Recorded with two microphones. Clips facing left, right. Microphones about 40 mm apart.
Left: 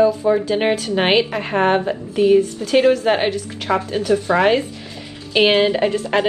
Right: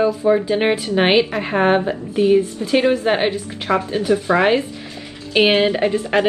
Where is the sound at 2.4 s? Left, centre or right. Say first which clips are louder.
Left 1 dB; right.